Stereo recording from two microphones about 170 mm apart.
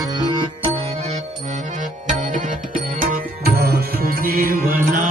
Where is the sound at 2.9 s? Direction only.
55° right (ahead or behind).